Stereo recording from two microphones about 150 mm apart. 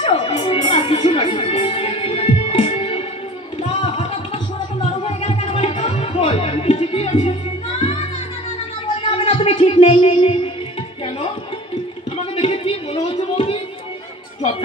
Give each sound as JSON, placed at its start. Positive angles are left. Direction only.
{"t": 0.0, "sound": "music", "side_deg": 40}
{"t": 3.6, "sound": "a sound", "side_deg": 40}
{"t": 5.0, "sound": "music", "side_deg": 40}
{"t": 9.0, "sound": "music", "side_deg": 40}
{"t": 12.4, "sound": "music", "side_deg": 45}